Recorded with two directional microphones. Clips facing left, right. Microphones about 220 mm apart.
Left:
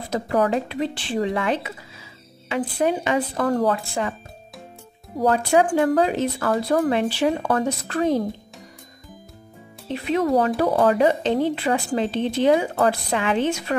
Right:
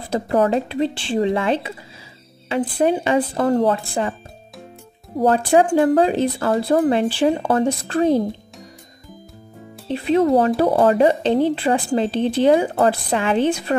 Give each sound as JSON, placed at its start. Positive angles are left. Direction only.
{"t": 0.1, "sound": "speech", "side_deg": -30}
{"t": 5.2, "sound": "speech", "side_deg": -30}
{"t": 9.8, "sound": "a woman's voice", "side_deg": -30}